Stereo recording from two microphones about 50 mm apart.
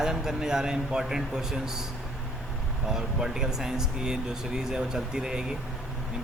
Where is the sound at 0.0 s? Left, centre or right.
Centre.